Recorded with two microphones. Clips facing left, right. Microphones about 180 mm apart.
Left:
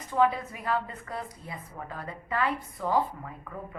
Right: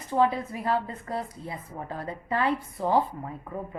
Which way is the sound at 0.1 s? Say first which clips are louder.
Right 1 dB; 30° right (ahead or behind).